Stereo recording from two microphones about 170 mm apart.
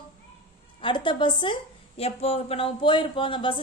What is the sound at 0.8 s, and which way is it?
A woman's voice, 30° left (ahead or behind).